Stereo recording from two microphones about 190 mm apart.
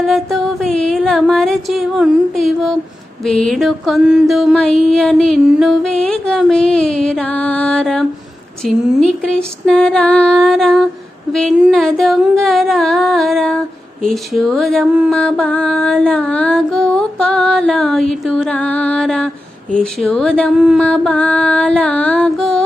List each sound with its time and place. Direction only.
0.1 s music: centre (ahead or behind)
3.2 s a sound: 5° left (ahead or behind)
20.8 s music: 5° left (ahead or behind)